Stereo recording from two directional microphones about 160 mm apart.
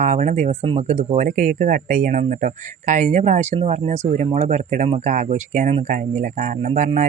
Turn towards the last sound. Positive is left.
turn(degrees=-50)  # may be behind; listen again after turning